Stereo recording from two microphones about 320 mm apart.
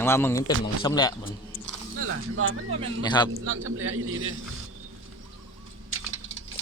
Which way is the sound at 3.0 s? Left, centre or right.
Centre.